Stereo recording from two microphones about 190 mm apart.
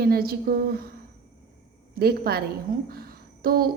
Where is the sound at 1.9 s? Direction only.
55° right (ahead or behind).